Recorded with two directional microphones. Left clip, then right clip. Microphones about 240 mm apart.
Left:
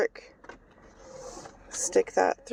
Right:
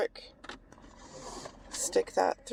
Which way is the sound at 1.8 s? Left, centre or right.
Left.